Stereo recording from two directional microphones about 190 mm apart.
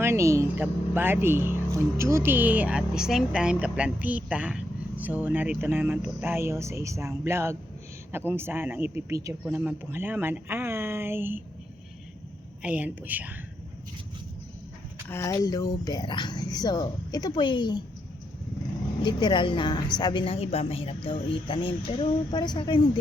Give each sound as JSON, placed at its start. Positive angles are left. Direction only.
{"t": 0.0, "sound": "speech", "side_deg": -15}
{"t": 12.6, "sound": "speech", "side_deg": -10}
{"t": 15.1, "sound": "a woman's voice", "side_deg": 15}
{"t": 19.0, "sound": "a woman's voice", "side_deg": 25}